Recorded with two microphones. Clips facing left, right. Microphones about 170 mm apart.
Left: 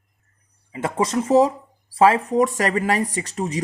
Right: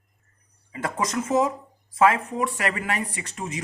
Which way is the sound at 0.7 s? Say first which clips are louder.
Left 5 dB; 25° left (ahead or behind).